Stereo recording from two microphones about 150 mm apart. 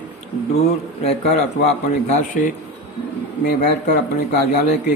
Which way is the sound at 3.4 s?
90° left.